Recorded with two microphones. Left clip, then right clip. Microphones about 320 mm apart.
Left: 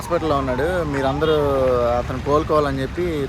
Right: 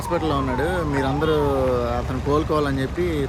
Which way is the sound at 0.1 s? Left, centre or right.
Centre.